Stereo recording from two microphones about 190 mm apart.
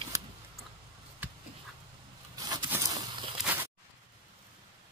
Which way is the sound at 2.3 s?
20° right (ahead or behind).